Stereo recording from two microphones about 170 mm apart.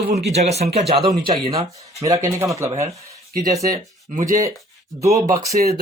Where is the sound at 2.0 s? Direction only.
20° right (ahead or behind).